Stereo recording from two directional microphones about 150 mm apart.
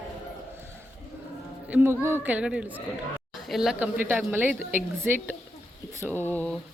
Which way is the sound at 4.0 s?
15° right (ahead or behind).